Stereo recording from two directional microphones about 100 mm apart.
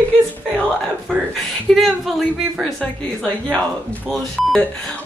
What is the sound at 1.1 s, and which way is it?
A woman's voice, 5° left (ahead or behind).